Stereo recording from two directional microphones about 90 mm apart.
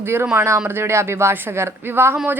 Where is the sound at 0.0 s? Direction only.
25° right (ahead or behind).